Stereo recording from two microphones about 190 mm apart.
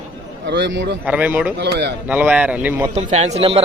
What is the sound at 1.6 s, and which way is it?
Speech, 60° right (ahead or behind).